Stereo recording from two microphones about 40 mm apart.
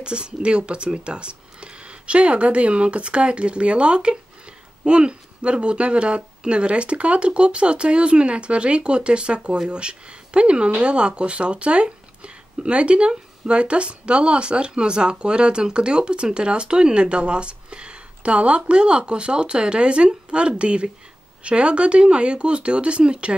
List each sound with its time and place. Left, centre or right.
0.0 s speech: right